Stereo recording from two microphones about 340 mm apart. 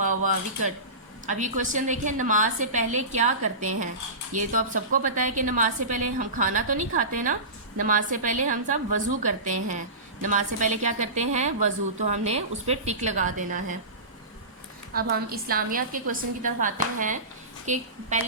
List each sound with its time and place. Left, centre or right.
0.0 s a woman's voice: right
14.9 s a woman's voice: right